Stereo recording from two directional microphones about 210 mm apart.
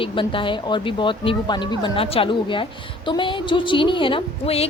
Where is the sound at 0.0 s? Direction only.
25° left (ahead or behind).